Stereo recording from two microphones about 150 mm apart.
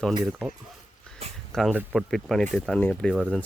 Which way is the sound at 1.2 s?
40° right (ahead or behind).